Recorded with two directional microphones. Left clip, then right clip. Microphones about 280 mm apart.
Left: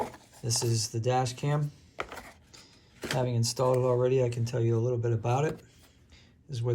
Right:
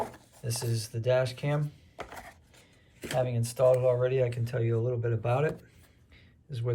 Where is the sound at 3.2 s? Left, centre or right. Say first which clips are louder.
Right 4 dB; left.